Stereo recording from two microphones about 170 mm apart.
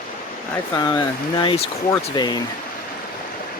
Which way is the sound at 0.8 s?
25° left (ahead or behind).